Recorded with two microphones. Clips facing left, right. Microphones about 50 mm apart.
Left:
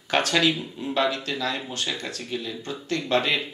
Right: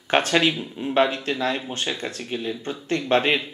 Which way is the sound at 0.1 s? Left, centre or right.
Right.